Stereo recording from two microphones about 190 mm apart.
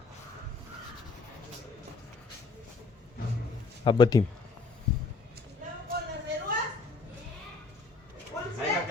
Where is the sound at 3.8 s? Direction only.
25° left (ahead or behind).